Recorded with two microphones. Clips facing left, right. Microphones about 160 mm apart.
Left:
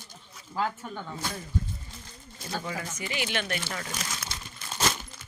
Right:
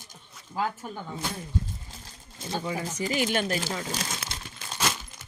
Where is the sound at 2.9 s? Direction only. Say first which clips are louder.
Right 9 dB; 40° right (ahead or behind).